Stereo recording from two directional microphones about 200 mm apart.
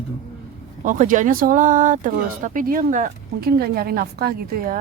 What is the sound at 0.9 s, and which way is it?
Speech, 40° right (ahead or behind).